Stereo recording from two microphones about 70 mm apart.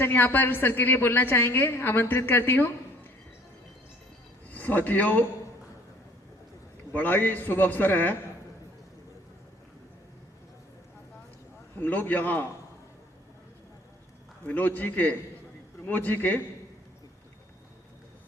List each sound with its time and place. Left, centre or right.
0.0 s a woman's voice: left
4.4 s speech: left
6.9 s a man's voice: left
11.8 s a man's voice: left
14.4 s a man's voice: left